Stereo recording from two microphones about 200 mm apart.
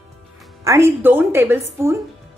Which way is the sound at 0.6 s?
15° right (ahead or behind).